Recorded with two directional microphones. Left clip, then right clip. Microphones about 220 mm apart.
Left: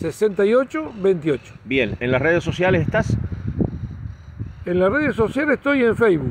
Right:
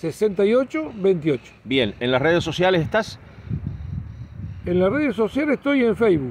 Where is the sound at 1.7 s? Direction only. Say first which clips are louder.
Left 1 dB; 15° right (ahead or behind).